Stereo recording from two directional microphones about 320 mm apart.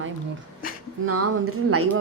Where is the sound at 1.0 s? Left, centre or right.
Right.